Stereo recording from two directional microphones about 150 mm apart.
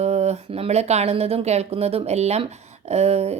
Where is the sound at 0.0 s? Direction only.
45° right (ahead or behind).